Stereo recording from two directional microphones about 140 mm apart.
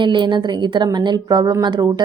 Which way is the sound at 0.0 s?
35° right (ahead or behind).